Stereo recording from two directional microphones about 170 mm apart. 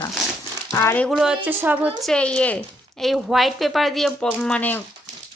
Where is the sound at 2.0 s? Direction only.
5° left (ahead or behind).